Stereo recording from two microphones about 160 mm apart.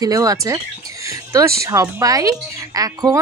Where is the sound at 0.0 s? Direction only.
20° right (ahead or behind).